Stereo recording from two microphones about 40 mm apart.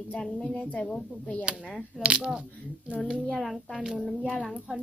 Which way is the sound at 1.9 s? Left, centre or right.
Centre.